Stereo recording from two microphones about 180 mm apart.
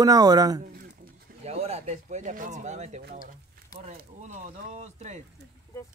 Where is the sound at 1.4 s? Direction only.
35° right (ahead or behind).